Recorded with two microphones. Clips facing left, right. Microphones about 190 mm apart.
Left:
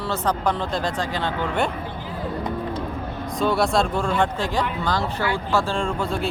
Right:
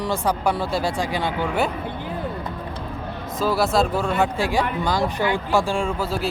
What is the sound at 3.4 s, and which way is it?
Speech, centre (ahead or behind).